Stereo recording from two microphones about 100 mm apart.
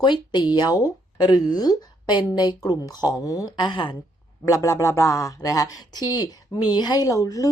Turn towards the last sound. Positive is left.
turn(degrees=35)  # may be behind; listen again after turning